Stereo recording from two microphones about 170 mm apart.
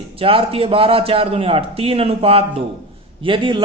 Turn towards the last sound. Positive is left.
turn(degrees=-30)  # may be behind; listen again after turning